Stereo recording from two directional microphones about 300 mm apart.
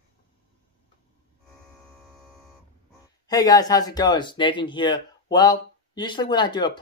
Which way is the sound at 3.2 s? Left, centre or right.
Centre.